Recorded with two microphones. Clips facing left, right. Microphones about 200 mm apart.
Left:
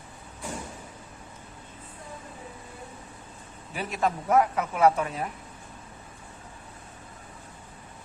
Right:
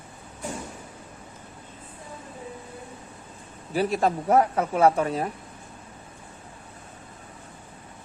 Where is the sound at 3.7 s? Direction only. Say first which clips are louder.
Right 5 dB; 35° right (ahead or behind).